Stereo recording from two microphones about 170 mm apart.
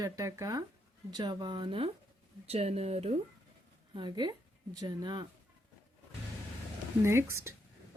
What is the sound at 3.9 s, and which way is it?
Speech, 25° right (ahead or behind).